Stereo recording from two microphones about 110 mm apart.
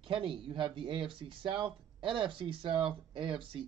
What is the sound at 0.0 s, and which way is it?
A man's voice, 50° right (ahead or behind).